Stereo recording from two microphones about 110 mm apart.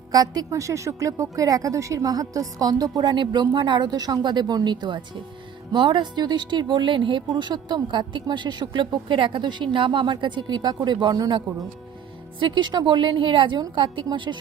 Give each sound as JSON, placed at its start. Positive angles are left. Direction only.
{"t": 0.1, "sound": "a woman's voice", "side_deg": -35}